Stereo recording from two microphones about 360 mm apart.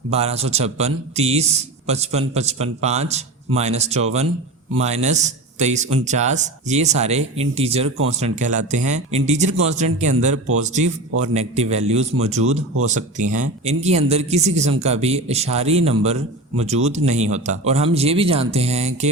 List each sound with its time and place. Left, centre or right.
0.1 s a man's voice: centre